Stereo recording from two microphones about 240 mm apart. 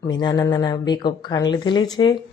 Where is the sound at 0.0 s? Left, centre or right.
Centre.